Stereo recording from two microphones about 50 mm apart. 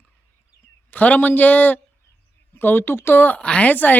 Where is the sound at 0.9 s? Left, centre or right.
Left.